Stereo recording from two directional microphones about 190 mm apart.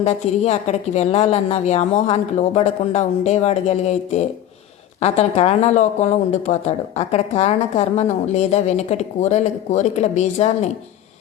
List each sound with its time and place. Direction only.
0.0 s speech: 35° left (ahead or behind)